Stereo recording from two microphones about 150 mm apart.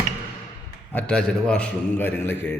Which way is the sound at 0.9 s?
10° left (ahead or behind).